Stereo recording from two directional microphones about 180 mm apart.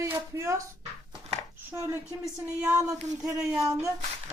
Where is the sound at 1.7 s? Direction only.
15° right (ahead or behind).